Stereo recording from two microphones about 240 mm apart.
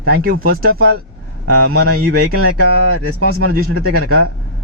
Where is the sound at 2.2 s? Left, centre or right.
Right.